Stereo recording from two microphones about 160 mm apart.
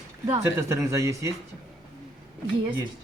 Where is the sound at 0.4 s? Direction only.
15° right (ahead or behind).